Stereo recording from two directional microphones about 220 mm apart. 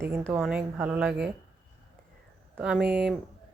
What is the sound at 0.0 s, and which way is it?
Speech, 10° right (ahead or behind).